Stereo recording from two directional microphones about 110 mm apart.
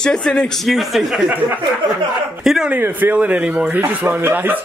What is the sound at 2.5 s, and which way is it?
Speech, 5° right (ahead or behind).